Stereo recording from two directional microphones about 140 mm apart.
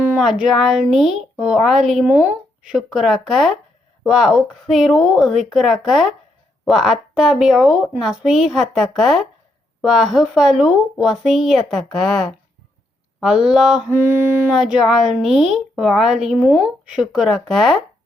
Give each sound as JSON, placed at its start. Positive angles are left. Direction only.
{"t": 0.2, "sound": "a woman's voice", "side_deg": 0}
{"t": 13.9, "sound": "mantra", "side_deg": -15}
{"t": 14.5, "sound": "a woman's voice", "side_deg": 0}